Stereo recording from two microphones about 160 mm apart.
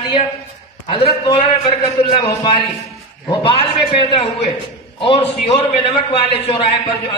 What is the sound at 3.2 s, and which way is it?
A woman's voice, 35° left (ahead or behind).